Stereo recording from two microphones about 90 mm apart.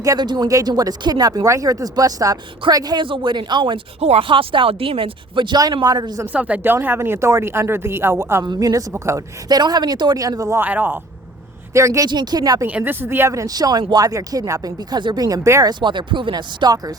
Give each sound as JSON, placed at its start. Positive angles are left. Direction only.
{"t": 0.2, "sound": "speech", "side_deg": -55}
{"t": 0.4, "sound": "speech", "side_deg": -45}
{"t": 5.7, "sound": "speech", "side_deg": -50}
{"t": 6.2, "sound": "speech", "side_deg": -15}
{"t": 8.4, "sound": "speech", "side_deg": -40}
{"t": 9.5, "sound": "speech", "side_deg": -50}
{"t": 10.6, "sound": "speech", "side_deg": -20}
{"t": 11.7, "sound": "speech", "side_deg": -35}
{"t": 12.0, "sound": "speech", "side_deg": -50}
{"t": 12.6, "sound": "speech", "side_deg": -20}
{"t": 14.8, "sound": "speech", "side_deg": -50}
{"t": 15.8, "sound": "speech", "side_deg": -60}